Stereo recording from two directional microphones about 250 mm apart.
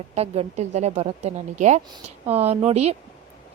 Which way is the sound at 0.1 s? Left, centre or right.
Right.